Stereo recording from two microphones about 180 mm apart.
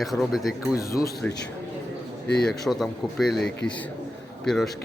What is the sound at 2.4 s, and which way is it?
Speech, centre (ahead or behind).